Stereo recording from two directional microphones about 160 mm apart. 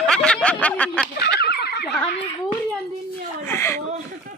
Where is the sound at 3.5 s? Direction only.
15° left (ahead or behind).